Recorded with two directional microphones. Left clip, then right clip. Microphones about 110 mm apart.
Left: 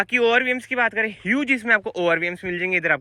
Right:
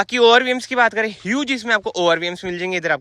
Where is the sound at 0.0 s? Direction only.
55° right (ahead or behind).